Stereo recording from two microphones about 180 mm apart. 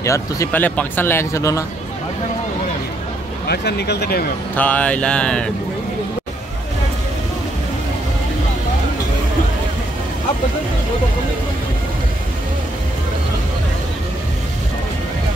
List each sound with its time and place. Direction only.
0.0 s speech: 15° left (ahead or behind)
3.4 s speech: 65° left (ahead or behind)
4.6 s speech: 10° left (ahead or behind)